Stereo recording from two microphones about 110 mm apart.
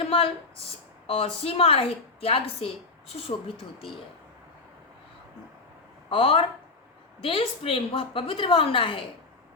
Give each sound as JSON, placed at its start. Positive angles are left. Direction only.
{"t": 0.0, "sound": "a woman's voice", "side_deg": 60}
{"t": 6.1, "sound": "a woman's voice", "side_deg": 55}